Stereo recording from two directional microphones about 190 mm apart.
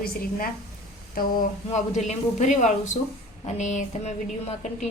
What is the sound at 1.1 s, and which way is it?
Speech, 50° left (ahead or behind).